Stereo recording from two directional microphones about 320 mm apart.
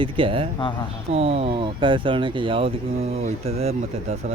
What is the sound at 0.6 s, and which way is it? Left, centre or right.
Speech, centre.